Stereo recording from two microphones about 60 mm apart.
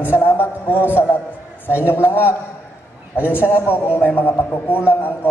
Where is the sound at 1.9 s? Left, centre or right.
Left.